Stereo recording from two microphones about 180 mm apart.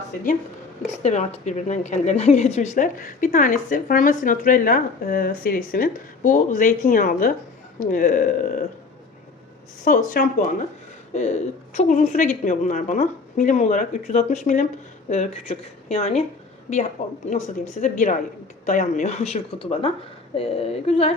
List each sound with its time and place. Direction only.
0.9 s a woman's voice: 40° left (ahead or behind)
9.8 s a woman's voice: 50° left (ahead or behind)